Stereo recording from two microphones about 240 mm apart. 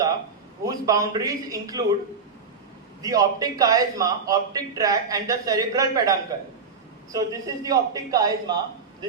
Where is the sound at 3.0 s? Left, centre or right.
Centre.